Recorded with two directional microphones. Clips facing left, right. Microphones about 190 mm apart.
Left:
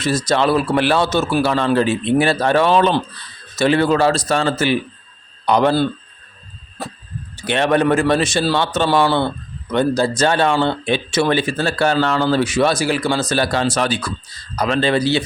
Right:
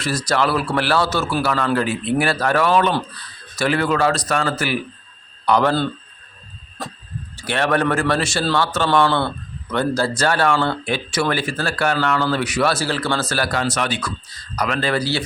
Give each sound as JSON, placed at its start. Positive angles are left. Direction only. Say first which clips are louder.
{"t": 0.0, "sound": "speech", "louder": "left 3 dB", "side_deg": 20}
{"t": 7.3, "sound": "speech", "louder": "left 3 dB", "side_deg": 20}